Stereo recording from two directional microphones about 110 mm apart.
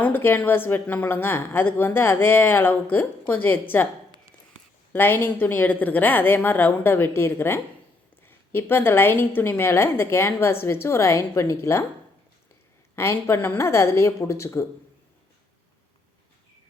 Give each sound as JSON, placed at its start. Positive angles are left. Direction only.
{"t": 0.0, "sound": "a woman's voice", "side_deg": 20}
{"t": 4.9, "sound": "a woman's voice", "side_deg": 20}
{"t": 13.0, "sound": "a woman's voice", "side_deg": 25}